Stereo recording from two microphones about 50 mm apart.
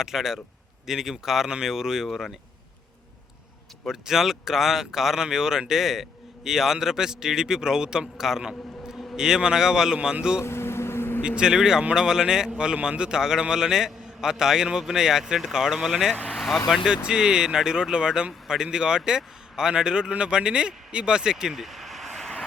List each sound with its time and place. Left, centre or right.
0.0 s speech: centre
3.8 s speech: centre
10.4 s vehicle: left
11.2 s speech: centre